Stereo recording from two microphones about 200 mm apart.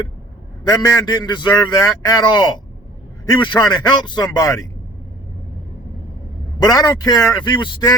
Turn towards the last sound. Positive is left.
turn(degrees=20)  # may be behind; listen again after turning